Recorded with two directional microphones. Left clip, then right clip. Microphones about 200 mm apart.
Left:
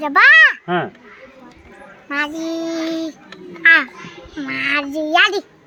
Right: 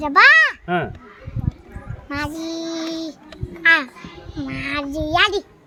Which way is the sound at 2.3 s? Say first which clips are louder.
Left 4 dB; 10° left (ahead or behind).